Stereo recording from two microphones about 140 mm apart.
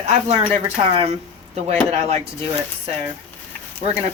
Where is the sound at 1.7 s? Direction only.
50° right (ahead or behind).